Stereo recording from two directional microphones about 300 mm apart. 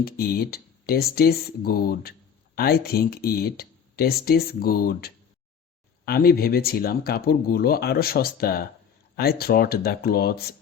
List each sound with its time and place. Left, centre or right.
0.0 s speech: left